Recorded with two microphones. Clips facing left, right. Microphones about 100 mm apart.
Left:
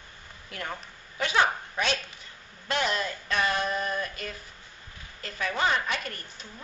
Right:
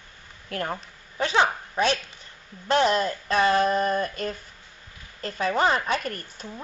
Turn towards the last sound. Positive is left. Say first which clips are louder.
# right 4 dB
turn(degrees=-45)  # may be behind; listen again after turning